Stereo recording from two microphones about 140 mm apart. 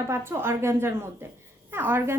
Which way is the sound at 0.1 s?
15° right (ahead or behind).